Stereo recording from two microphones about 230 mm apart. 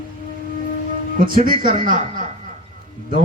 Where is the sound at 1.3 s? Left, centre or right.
Right.